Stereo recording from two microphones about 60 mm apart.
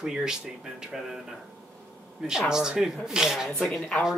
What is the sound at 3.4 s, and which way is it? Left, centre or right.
Speech, centre.